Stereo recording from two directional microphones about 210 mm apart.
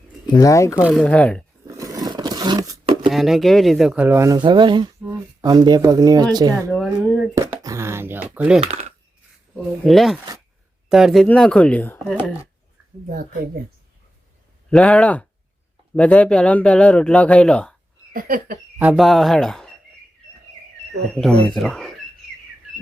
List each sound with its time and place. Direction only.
0.3 s speech: 15° left (ahead or behind)
0.8 s speech: 5° right (ahead or behind)
1.0 s speech: 5° left (ahead or behind)
1.6 s a sound: 15° right (ahead or behind)
3.1 s speech: centre (ahead or behind); by 6.7 s 15° right (ahead or behind)
6.7 s speech: centre (ahead or behind)
7.3 s speech: 15° right (ahead or behind)
9.8 s speech: centre (ahead or behind)
13.1 s a woman's voice: 40° right (ahead or behind)
14.7 s speech: 5° left (ahead or behind)
18.1 s a sound: 40° right (ahead or behind)
18.8 s speech: 5° right (ahead or behind)
21.2 s speech: 5° left (ahead or behind)